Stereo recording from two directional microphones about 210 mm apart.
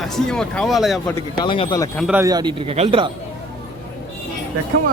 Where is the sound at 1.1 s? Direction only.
20° left (ahead or behind).